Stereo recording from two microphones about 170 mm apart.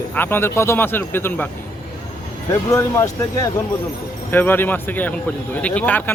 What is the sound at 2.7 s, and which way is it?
Speech, 20° left (ahead or behind).